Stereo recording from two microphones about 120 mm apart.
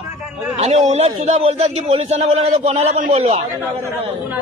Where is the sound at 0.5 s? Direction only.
70° right (ahead or behind).